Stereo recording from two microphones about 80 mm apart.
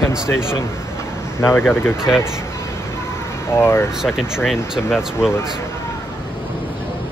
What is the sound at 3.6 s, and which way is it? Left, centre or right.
Speech, left.